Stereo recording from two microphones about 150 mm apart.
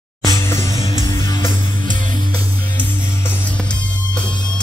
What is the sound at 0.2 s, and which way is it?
Music, 20° left (ahead or behind).